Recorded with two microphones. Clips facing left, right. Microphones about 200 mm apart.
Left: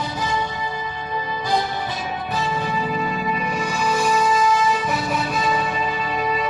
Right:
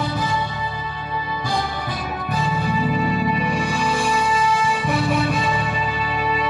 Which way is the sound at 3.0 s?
45° right (ahead or behind).